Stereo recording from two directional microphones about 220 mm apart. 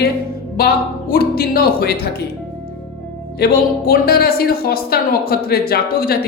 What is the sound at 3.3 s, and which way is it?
Speech, 45° left (ahead or behind).